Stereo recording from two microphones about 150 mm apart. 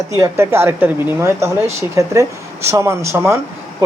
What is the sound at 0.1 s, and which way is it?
Speech, 20° right (ahead or behind).